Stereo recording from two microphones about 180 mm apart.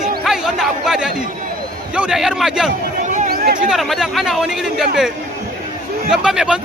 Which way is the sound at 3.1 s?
50° right (ahead or behind).